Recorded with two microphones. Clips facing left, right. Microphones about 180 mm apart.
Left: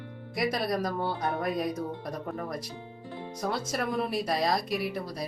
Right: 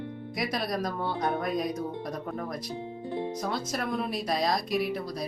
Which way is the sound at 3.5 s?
Centre (ahead or behind).